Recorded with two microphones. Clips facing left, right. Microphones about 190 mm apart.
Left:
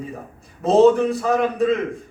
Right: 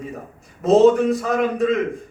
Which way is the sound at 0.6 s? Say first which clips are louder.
Right 1 dB; 35° left (ahead or behind).